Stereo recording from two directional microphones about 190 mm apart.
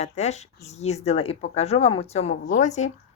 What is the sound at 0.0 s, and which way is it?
A woman's voice, 35° left (ahead or behind).